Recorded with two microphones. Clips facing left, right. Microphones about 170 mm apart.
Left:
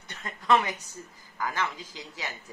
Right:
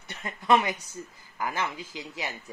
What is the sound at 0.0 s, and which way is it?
A woman's voice, 10° right (ahead or behind).